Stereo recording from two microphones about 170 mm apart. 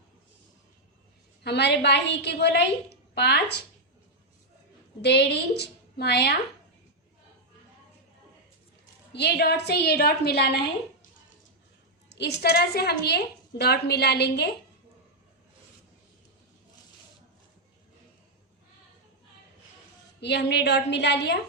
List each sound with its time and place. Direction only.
1.5 s a woman's voice: 85° left
5.0 s a woman's voice: 80° left
9.1 s a woman's voice: 75° left (ahead or behind)
12.0 s a woman's voice: 85° left
20.2 s a woman's voice: 80° left